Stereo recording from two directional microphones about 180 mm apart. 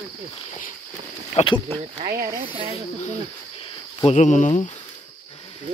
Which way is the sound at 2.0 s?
55° right (ahead or behind).